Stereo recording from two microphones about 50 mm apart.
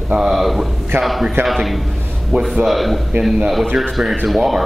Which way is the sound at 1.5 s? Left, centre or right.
Centre.